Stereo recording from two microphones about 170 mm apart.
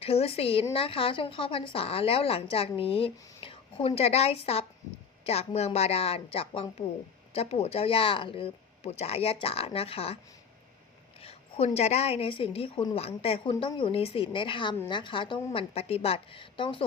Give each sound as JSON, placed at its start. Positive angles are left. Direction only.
{"t": 0.0, "sound": "speech", "side_deg": 35}
{"t": 11.2, "sound": "speech", "side_deg": 35}